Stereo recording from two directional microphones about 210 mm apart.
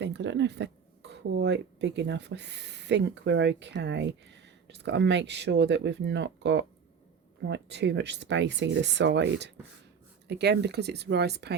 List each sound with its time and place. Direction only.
0.0 s speech: 55° right (ahead or behind)